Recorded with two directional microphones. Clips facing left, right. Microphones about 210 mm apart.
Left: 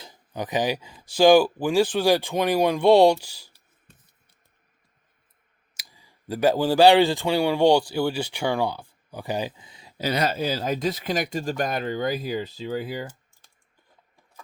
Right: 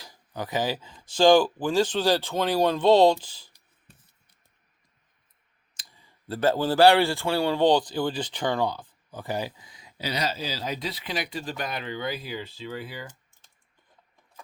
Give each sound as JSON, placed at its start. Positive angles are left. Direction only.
{"t": 0.0, "sound": "speech", "side_deg": 20}
{"t": 5.7, "sound": "speech", "side_deg": 10}
{"t": 10.0, "sound": "speech", "side_deg": 50}